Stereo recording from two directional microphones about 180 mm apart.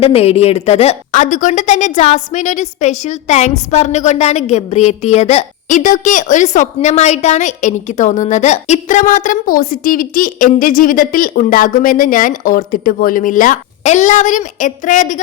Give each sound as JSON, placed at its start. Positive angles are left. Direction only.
{"t": 0.0, "sound": "a woman's voice", "side_deg": 35}